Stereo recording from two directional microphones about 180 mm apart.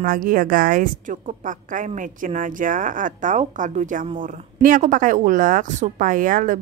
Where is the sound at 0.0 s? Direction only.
50° right (ahead or behind).